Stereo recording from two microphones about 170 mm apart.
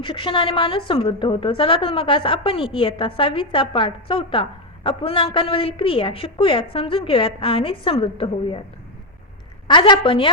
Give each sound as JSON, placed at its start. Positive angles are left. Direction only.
{"t": 0.0, "sound": "a woman's voice", "side_deg": 30}
{"t": 9.6, "sound": "a woman's voice", "side_deg": 30}